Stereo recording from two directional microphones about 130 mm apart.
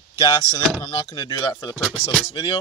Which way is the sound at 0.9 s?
40° left (ahead or behind).